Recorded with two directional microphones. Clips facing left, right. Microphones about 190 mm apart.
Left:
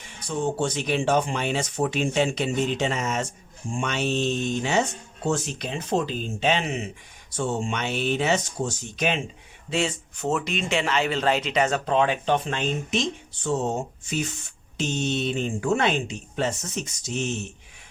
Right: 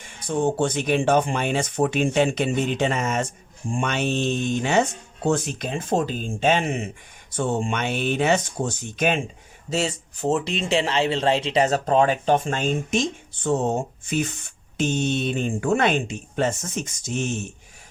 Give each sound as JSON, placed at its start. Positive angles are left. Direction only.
{"t": 0.0, "sound": "speech", "side_deg": -55}
{"t": 9.6, "sound": "speech", "side_deg": -40}